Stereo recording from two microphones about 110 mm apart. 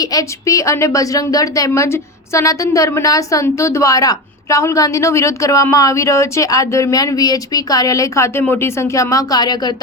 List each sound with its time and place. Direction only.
0.0 s a woman's voice: 35° left (ahead or behind)